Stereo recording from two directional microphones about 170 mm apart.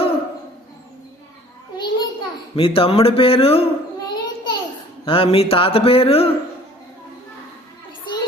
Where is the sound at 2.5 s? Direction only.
30° left (ahead or behind).